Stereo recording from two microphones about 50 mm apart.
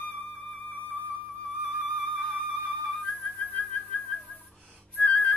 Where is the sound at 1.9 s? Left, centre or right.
Centre.